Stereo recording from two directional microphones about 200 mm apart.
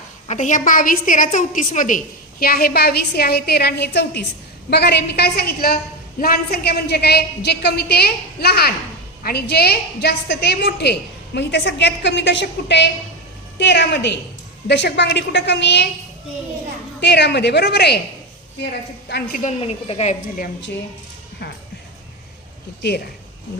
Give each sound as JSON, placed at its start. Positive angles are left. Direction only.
{"t": 0.3, "sound": "a woman's voice", "side_deg": 40}
{"t": 17.0, "sound": "a woman's voice", "side_deg": 60}
{"t": 19.4, "sound": "a woman's voice", "side_deg": 30}